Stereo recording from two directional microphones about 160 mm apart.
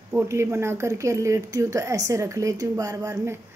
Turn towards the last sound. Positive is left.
turn(degrees=-15)  # may be behind; listen again after turning